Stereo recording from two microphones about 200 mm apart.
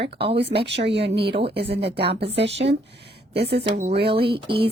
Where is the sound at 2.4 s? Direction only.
30° right (ahead or behind).